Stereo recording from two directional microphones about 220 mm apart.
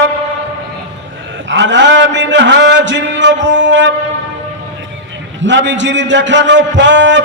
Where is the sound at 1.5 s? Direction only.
55° right (ahead or behind).